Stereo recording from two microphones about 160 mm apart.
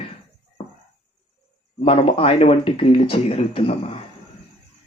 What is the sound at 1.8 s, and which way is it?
Speech, 35° left (ahead or behind).